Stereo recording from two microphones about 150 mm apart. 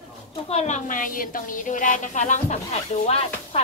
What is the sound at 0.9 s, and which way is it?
Speech, 65° left (ahead or behind).